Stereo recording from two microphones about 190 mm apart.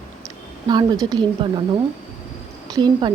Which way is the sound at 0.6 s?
20° right (ahead or behind).